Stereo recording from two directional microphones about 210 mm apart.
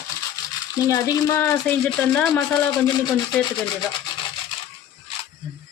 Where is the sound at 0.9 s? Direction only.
15° left (ahead or behind).